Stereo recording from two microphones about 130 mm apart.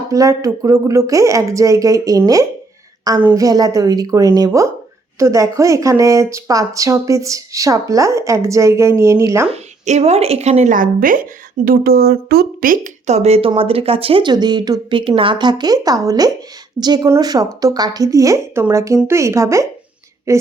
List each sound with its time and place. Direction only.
0.1 s speech: 25° right (ahead or behind)
9.5 s a woman's voice: 55° right (ahead or behind); by 20.4 s 25° right (ahead or behind)